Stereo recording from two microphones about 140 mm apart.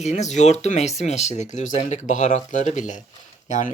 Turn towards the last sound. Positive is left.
turn(degrees=60)  # may be behind; listen again after turning